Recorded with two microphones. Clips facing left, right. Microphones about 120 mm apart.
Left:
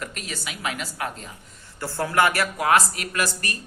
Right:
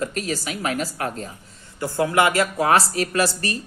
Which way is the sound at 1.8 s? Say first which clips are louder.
Right 3 dB; 15° right (ahead or behind).